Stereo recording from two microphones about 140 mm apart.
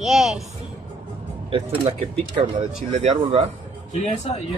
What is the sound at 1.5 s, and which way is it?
Speech, 40° right (ahead or behind).